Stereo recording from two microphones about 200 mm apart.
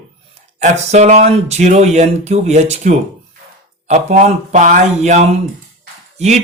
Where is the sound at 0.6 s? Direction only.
35° right (ahead or behind).